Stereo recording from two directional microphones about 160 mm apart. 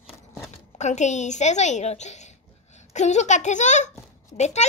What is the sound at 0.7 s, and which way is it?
A woman's voice, 45° left (ahead or behind).